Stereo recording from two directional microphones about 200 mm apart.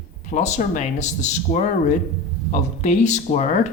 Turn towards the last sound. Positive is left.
turn(degrees=35)  # may be behind; listen again after turning